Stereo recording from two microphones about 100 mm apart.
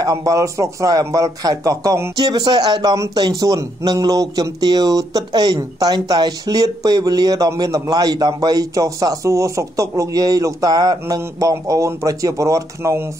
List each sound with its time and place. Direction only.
0.0 s speech: 35° right (ahead or behind)